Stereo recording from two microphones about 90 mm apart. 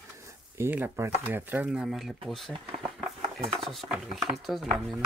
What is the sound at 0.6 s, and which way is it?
Speech, 20° right (ahead or behind).